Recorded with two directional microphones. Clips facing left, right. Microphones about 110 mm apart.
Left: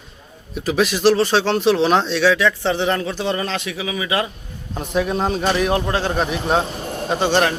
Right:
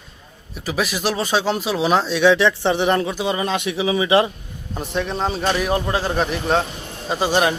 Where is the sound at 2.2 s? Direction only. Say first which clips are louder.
Right 1 dB; 20° right (ahead or behind).